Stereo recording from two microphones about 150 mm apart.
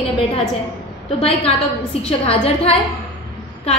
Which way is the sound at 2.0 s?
40° left (ahead or behind).